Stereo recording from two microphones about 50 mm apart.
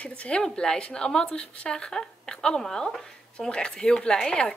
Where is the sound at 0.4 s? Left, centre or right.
Centre.